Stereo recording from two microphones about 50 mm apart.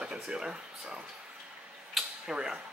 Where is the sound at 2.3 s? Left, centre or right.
Centre.